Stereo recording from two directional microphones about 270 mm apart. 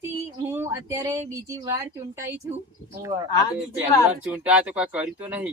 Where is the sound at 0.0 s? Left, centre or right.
Centre.